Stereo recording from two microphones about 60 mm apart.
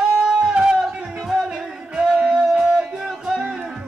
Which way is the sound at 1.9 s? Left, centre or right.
Centre.